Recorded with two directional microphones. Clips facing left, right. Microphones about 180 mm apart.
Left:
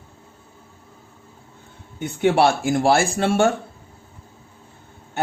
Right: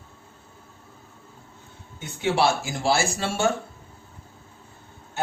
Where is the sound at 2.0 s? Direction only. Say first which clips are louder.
Left 6 dB; 55° left (ahead or behind).